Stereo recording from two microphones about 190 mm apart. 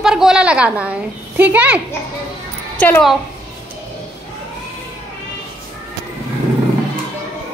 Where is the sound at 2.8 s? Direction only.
5° left (ahead or behind).